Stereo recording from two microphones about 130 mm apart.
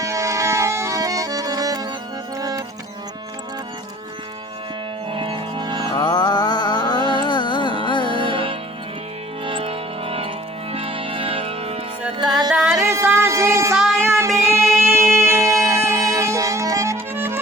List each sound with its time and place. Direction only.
0.0 s music: 25° right (ahead or behind)
5.1 s music: 40° right (ahead or behind)
6.0 s mantra: 30° left (ahead or behind)
7.0 s music: 35° right (ahead or behind)
7.3 s carnatic music: 35° left (ahead or behind)
8.0 s music: 40° right (ahead or behind)
12.5 s music: 5° right (ahead or behind)
12.8 s music: 15° right (ahead or behind)
13.7 s music: centre (ahead or behind)
14.9 s music: 20° right (ahead or behind)